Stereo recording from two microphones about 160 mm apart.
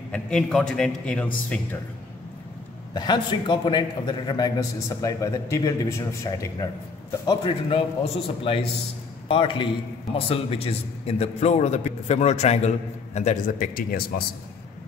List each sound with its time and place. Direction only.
0.1 s a man's voice: 5° left (ahead or behind)
2.9 s a man's voice: 25° left (ahead or behind)
7.2 s a man's voice: 35° left (ahead or behind); by 14.2 s 65° left (ahead or behind)